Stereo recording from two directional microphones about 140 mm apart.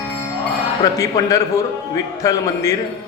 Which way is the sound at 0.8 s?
25° left (ahead or behind).